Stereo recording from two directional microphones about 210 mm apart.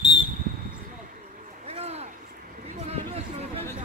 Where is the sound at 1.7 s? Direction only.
30° right (ahead or behind).